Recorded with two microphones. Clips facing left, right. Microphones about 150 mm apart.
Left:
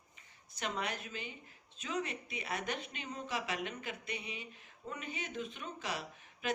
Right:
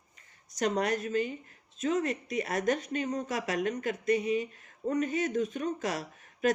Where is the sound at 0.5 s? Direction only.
45° right (ahead or behind).